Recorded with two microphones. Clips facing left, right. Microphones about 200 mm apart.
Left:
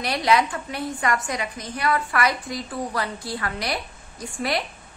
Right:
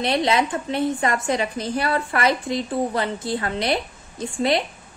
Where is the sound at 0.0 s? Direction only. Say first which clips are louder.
Right 1 dB; 25° right (ahead or behind).